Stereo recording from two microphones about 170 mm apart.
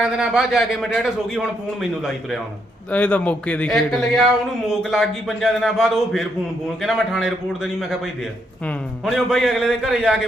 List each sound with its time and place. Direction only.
0.0 s a man's voice: 5° right (ahead or behind)